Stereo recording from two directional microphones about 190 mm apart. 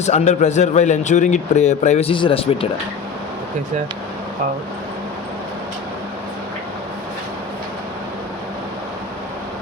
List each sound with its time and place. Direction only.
0.0 s speech: 35° left (ahead or behind)